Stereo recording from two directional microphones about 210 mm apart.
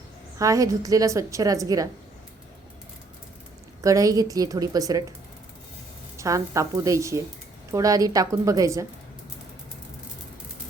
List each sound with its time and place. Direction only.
0.3 s a woman's voice: 15° right (ahead or behind)
3.8 s a woman's voice: 15° right (ahead or behind)
6.1 s a woman's voice: 15° right (ahead or behind)